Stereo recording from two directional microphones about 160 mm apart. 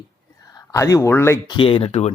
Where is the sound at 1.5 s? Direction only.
35° left (ahead or behind).